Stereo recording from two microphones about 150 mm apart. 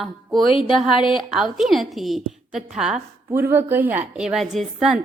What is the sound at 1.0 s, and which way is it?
A woman's voice, centre (ahead or behind).